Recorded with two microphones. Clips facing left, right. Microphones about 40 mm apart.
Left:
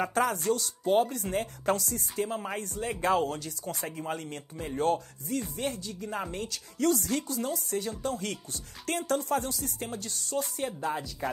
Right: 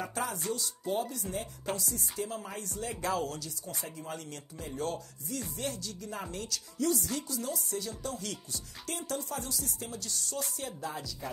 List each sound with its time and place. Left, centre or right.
0.0 s a woman's voice: left
2.2 s a woman's voice: left